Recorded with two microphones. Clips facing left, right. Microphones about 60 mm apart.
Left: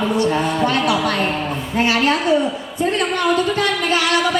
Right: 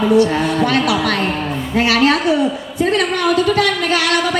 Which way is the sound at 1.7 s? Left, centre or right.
Right.